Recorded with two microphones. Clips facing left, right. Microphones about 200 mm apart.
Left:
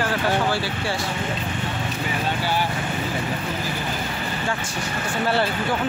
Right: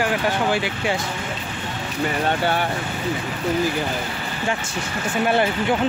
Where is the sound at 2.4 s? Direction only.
60° right (ahead or behind).